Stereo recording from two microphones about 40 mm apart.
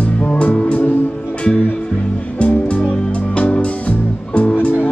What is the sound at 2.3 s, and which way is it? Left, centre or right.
Music, left.